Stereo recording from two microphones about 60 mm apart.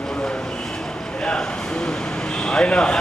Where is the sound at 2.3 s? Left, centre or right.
Centre.